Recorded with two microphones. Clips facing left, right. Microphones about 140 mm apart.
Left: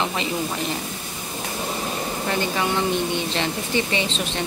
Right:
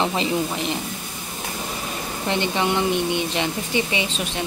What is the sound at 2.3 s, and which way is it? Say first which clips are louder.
Speech: right 2 dB; 25° right (ahead or behind).